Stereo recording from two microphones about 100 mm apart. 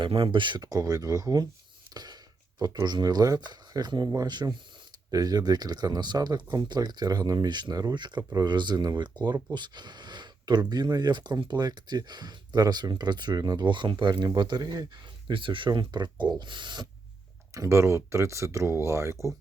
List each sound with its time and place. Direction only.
0.0 s speech: 60° right (ahead or behind); by 1.5 s 40° right (ahead or behind)
1.9 s a sound: 45° right (ahead or behind)
2.6 s speech: 40° right (ahead or behind)
15.3 s speech: 60° right (ahead or behind)
17.5 s speech: 30° right (ahead or behind)